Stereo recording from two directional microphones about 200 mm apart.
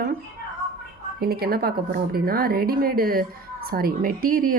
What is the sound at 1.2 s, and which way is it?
Speech, 50° right (ahead or behind).